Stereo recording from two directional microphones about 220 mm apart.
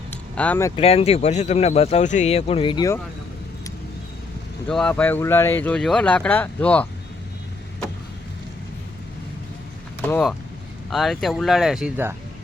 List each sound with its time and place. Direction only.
0.1 s a sound: 5° left (ahead or behind)
0.8 s speech: 25° left (ahead or behind)
4.7 s speech: 5° left (ahead or behind)
10.0 s speech: 5° left (ahead or behind)